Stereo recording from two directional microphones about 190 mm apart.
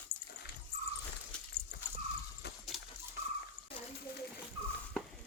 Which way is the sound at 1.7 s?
60° left (ahead or behind).